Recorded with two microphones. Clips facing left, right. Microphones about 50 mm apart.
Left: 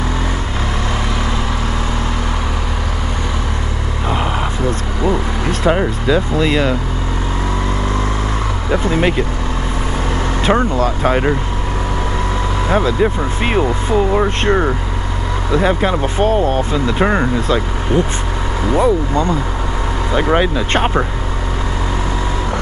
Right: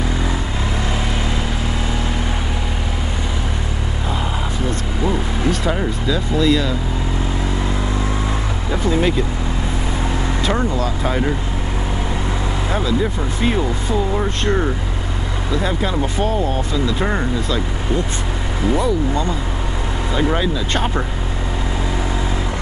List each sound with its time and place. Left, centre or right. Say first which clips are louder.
4.6 s vehicle: left 3 dB; left
5.8 s speech: left 5 dB; left
8.7 s speech: left 2 dB; left
10.4 s speech: left 6 dB; left
12.6 s speech: left 6 dB; left
18.8 s speech: left 8 dB; left